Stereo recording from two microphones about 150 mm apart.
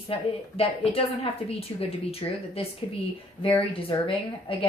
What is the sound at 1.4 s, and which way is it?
A woman's voice, 40° left (ahead or behind).